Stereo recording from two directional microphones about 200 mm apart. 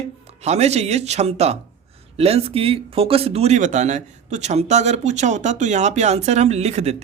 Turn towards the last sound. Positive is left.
turn(degrees=-35)  # may be behind; listen again after turning